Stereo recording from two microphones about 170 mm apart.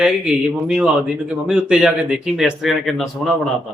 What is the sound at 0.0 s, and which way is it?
Speech, 5° right (ahead or behind).